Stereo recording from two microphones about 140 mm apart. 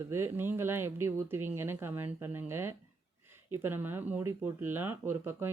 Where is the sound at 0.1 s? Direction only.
15° right (ahead or behind).